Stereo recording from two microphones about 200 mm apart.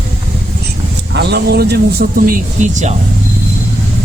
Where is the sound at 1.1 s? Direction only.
60° right (ahead or behind).